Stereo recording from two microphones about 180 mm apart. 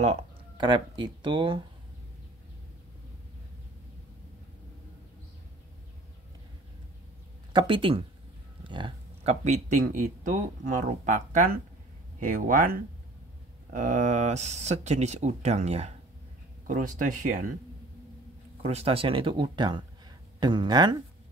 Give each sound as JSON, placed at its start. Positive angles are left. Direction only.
{"t": 0.6, "sound": "speech", "side_deg": -25}
{"t": 7.5, "sound": "speech", "side_deg": -30}
{"t": 18.6, "sound": "speech", "side_deg": -35}